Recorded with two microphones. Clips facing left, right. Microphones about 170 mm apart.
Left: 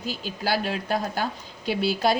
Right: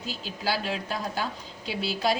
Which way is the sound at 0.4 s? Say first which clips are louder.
Left 3 dB; 55° left (ahead or behind).